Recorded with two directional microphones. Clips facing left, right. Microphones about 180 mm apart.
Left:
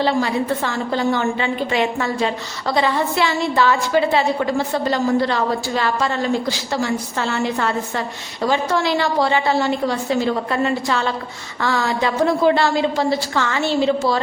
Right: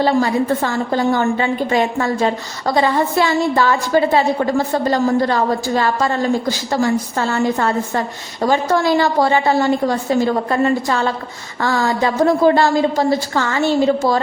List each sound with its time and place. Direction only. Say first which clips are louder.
0.0 s a woman's voice: right 3 dB; 45° right (ahead or behind)